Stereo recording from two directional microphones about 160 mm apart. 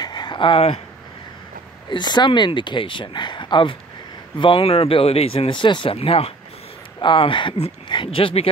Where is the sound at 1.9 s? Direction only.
25° left (ahead or behind).